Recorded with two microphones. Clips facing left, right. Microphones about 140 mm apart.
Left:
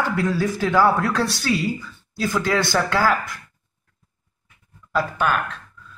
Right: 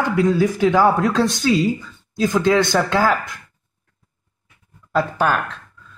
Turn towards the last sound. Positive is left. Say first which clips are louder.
# right 3 dB
turn(degrees=-35)  # may be behind; listen again after turning